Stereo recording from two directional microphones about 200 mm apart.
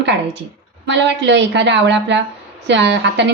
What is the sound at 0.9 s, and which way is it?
A woman's voice, 60° right (ahead or behind).